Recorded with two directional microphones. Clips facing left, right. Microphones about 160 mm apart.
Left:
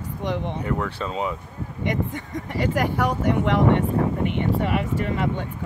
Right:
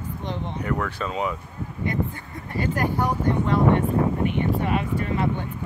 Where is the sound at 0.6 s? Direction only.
25° left (ahead or behind).